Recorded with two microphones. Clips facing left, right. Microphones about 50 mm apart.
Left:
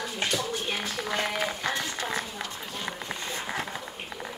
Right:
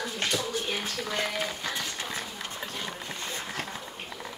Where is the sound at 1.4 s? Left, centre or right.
Left.